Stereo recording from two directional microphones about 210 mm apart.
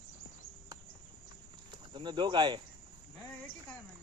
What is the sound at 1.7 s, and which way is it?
Speech, 20° right (ahead or behind).